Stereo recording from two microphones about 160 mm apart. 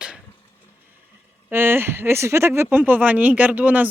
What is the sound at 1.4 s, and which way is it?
Speech, 15° right (ahead or behind).